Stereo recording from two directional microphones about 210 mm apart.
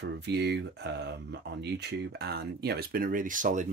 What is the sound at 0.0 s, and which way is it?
Speech, 55° right (ahead or behind).